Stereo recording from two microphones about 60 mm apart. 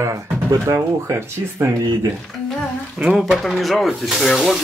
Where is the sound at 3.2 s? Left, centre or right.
Centre.